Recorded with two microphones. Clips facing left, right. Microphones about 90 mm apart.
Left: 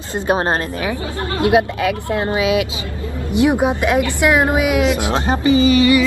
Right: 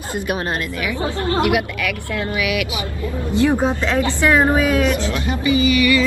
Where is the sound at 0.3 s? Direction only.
30° left (ahead or behind); by 4.8 s 15° left (ahead or behind).